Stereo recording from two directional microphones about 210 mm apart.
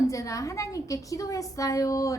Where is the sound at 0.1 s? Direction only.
15° left (ahead or behind).